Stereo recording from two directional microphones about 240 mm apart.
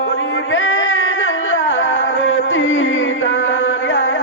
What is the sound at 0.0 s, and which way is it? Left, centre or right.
Carnatic music, left.